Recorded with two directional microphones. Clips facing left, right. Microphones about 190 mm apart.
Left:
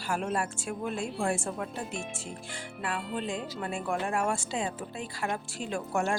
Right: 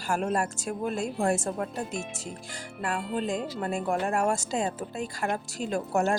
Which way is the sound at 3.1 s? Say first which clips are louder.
Right 4 dB; 40° right (ahead or behind).